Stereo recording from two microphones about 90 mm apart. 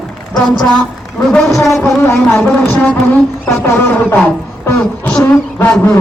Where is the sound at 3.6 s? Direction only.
25° left (ahead or behind).